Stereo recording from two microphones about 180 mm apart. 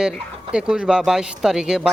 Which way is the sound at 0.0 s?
5° right (ahead or behind).